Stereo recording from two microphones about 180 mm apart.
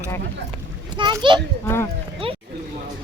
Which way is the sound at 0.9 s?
25° right (ahead or behind).